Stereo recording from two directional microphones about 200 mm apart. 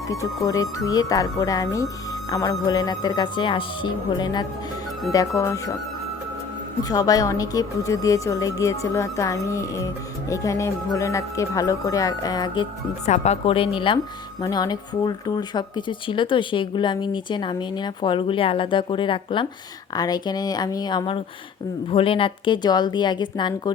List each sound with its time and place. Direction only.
0.4 s a woman's voice: 15° left (ahead or behind)
6.8 s a woman's voice: 20° left (ahead or behind)
13.1 s speech: 35° left (ahead or behind)